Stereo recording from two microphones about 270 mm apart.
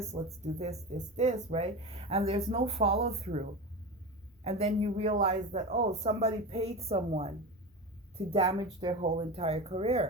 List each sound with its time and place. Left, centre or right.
0.4 s speech: right
4.4 s speech: right